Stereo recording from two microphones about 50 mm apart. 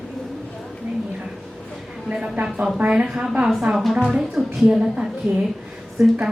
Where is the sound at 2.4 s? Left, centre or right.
Centre.